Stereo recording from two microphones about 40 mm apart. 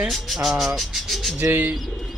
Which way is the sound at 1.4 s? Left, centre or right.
Right.